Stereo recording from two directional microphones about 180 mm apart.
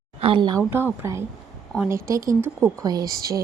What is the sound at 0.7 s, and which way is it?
Speech, 15° right (ahead or behind).